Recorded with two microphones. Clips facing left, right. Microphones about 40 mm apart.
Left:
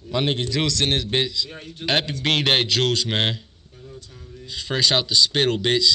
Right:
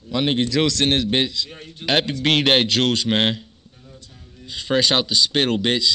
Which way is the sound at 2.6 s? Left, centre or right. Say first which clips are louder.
Right 2 dB; right.